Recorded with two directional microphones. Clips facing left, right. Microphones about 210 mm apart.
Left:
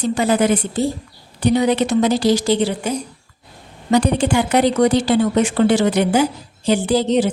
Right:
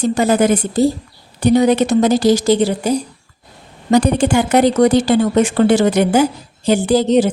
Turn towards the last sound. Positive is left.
turn(degrees=-45)  # may be behind; listen again after turning